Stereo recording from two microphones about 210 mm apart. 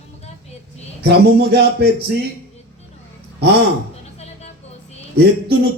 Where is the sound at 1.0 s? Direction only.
50° right (ahead or behind).